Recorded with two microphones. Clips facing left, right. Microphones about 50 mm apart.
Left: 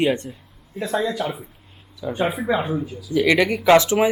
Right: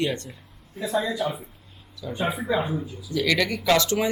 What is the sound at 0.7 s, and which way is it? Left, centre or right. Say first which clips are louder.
Speech: left 2 dB; left.